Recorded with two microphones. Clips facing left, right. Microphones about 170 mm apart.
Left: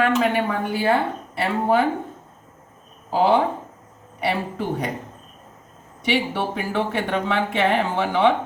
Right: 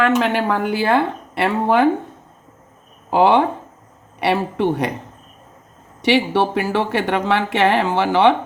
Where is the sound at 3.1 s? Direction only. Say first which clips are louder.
Right 4 dB; 75° right (ahead or behind).